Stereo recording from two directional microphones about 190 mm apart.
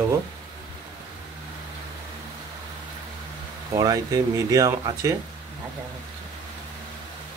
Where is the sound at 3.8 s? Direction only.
20° right (ahead or behind).